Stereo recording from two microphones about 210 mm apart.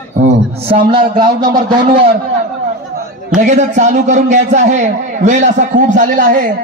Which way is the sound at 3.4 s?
35° right (ahead or behind).